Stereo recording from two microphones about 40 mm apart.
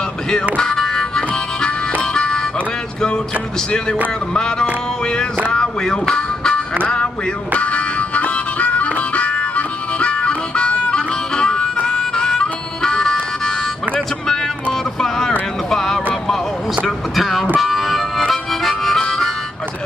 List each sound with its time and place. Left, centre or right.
0.6 s music: centre
4.3 s music: left
5.5 s speech: centre
6.1 s music: left
7.5 s harmonica: left; by 13.6 s centre
14.2 s vehicle: centre
15.7 s music: centre
16.8 s a sound: centre
17.6 s music: centre
18.3 s harmonica: centre